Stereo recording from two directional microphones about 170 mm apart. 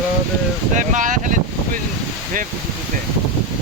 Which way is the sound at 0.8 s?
50° right (ahead or behind).